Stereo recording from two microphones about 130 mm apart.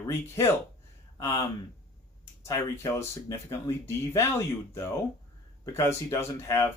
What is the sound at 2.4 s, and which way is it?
Speech, 25° left (ahead or behind).